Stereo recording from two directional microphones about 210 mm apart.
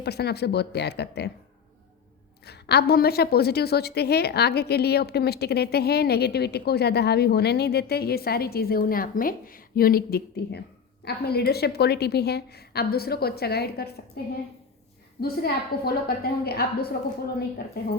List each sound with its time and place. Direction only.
0.0 s a woman's voice: 50° left (ahead or behind)
2.5 s a woman's voice: 50° left (ahead or behind)
15.2 s a woman's voice: 45° left (ahead or behind)